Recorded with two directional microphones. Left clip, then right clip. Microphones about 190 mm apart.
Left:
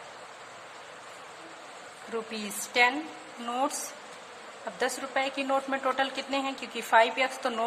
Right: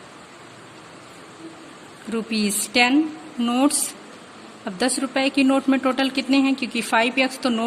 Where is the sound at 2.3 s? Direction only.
20° right (ahead or behind).